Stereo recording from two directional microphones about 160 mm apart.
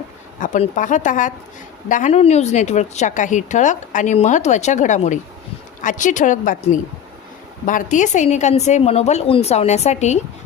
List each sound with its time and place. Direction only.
0.3 s a woman's voice: 55° left (ahead or behind)
7.6 s a woman's voice: 55° left (ahead or behind)